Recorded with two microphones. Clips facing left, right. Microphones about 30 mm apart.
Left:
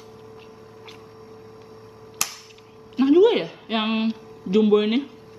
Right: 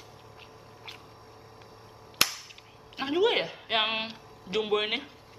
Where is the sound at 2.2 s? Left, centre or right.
Right.